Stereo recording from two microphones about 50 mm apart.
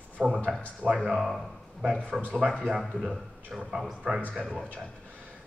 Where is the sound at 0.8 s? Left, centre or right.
Right.